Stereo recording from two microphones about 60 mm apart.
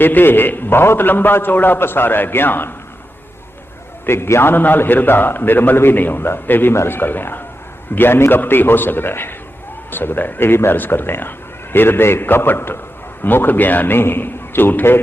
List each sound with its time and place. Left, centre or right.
0.0 s speech: left
4.0 s speech: left